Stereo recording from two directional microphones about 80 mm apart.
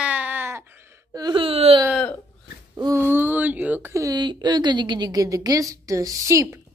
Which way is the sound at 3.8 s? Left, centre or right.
Right.